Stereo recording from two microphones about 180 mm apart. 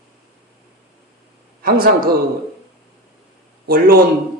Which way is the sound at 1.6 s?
55° right (ahead or behind).